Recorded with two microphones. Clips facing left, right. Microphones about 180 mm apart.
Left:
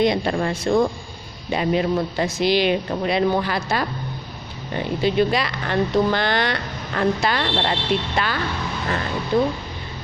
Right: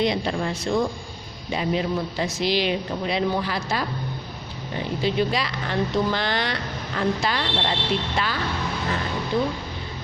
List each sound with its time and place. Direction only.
0.0 s speech: 55° left (ahead or behind)
9.3 s speech: 55° left (ahead or behind)